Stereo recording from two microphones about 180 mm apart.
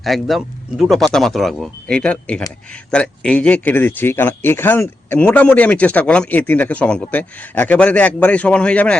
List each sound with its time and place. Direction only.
0.0 s speech: centre (ahead or behind)